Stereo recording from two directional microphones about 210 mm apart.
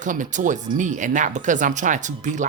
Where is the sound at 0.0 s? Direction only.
35° right (ahead or behind).